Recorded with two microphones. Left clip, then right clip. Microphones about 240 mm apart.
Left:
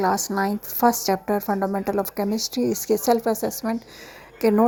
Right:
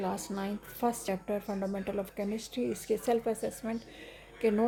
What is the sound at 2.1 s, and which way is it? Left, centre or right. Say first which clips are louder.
Speech: left 11 dB; centre.